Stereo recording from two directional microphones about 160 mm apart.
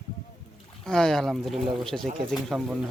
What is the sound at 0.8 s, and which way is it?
Speech, 5° left (ahead or behind).